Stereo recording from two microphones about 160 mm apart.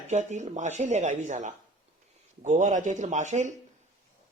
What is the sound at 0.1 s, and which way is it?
Speech, 50° right (ahead or behind).